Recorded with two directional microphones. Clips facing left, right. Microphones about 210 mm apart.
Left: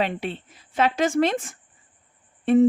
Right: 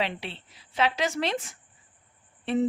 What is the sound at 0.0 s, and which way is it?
Speech, 50° left (ahead or behind).